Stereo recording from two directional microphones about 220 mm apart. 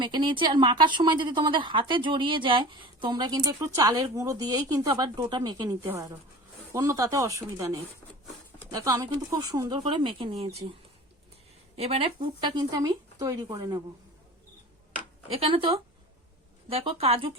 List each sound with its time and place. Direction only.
0.0 s a woman's voice: 20° right (ahead or behind)
11.8 s a woman's voice: 25° right (ahead or behind)
15.3 s a woman's voice: 25° right (ahead or behind)